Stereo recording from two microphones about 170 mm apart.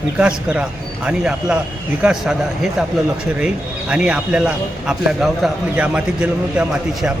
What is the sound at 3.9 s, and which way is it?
A man's voice, 5° right (ahead or behind).